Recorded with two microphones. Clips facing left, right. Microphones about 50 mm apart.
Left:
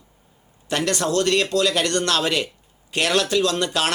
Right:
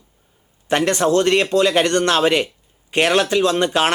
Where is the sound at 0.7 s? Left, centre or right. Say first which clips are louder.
Right 6 dB; right.